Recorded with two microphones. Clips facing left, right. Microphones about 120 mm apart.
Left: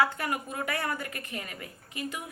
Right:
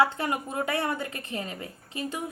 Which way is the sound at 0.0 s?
25° right (ahead or behind).